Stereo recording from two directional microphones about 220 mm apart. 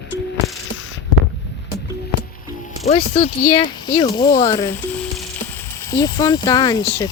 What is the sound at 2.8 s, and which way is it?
Speech, 25° left (ahead or behind).